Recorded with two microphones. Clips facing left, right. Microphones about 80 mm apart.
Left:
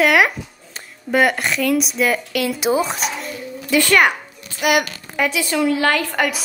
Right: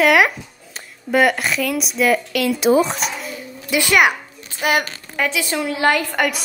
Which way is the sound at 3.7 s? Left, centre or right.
Centre.